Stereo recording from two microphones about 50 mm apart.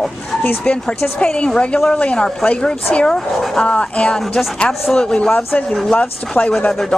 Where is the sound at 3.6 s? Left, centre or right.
Left.